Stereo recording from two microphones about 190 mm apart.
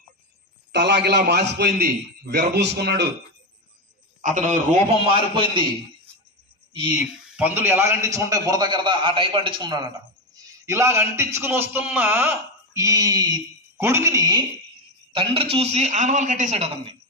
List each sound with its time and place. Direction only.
0.7 s a man's voice: 60° right (ahead or behind)
4.2 s a man's voice: 40° right (ahead or behind)
5.0 s a man's voice: 25° right (ahead or behind)
7.3 s a man's voice: 10° right (ahead or behind)
15.1 s a man's voice: 30° right (ahead or behind)